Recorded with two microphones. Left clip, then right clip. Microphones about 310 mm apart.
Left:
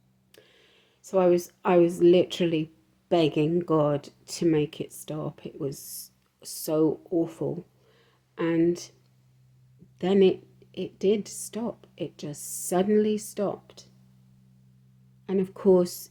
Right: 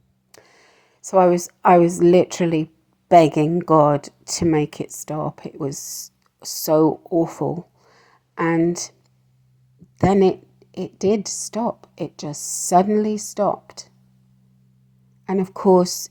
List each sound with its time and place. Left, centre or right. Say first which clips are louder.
0.3 s a woman's voice: right 6 dB; right
10.0 s a woman's voice: right 5 dB; right
15.3 s a woman's voice: right 6 dB; right